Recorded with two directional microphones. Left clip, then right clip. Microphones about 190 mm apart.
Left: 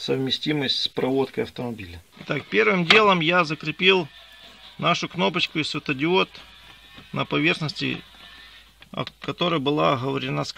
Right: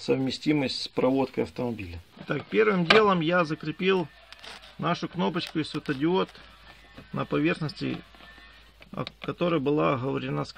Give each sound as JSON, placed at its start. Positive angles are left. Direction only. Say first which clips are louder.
{"t": 0.0, "sound": "speech", "louder": "left 2 dB", "side_deg": 20}
{"t": 2.2, "sound": "speech", "louder": "left 3 dB", "side_deg": 40}
{"t": 8.9, "sound": "speech", "louder": "left 4 dB", "side_deg": 45}